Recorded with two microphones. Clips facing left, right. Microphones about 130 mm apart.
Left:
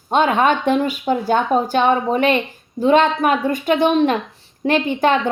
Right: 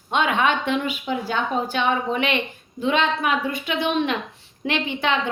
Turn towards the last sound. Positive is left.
turn(degrees=45)  # may be behind; listen again after turning